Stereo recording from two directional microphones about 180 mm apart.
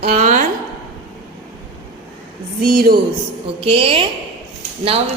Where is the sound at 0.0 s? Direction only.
45° right (ahead or behind).